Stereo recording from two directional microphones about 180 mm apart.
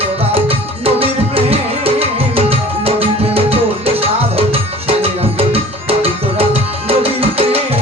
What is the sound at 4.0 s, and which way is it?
Music, 35° right (ahead or behind).